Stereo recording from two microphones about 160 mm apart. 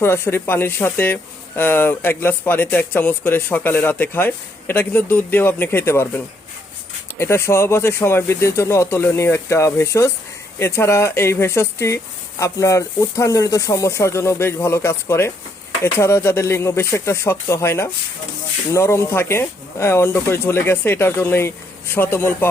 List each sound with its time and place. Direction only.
0.0 s speech: 15° left (ahead or behind)
7.2 s speech: 15° left (ahead or behind)